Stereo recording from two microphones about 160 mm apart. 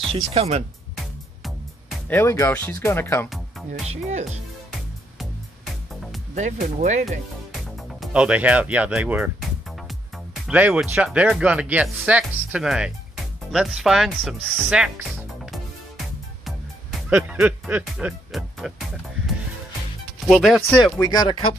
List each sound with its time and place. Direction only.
0.1 s speech: 40° right (ahead or behind)
0.9 s music: centre (ahead or behind)
2.0 s speech: 15° left (ahead or behind)
3.3 s music: centre (ahead or behind)
3.8 s speech: 45° right (ahead or behind)
5.2 s music: centre (ahead or behind)
6.3 s speech: 45° right (ahead or behind)
8.0 s speech: 5° right (ahead or behind)
17.1 s speech: 10° right (ahead or behind)
20.2 s speech: 5° right (ahead or behind)
21.0 s speech: 25° left (ahead or behind)